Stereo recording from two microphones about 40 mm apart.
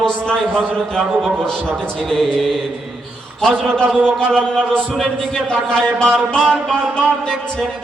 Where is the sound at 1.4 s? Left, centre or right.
Centre.